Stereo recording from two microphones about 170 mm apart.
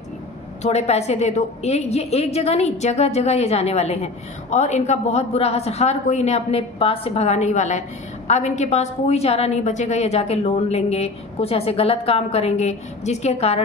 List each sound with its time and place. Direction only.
0.6 s a woman's voice: 40° left (ahead or behind)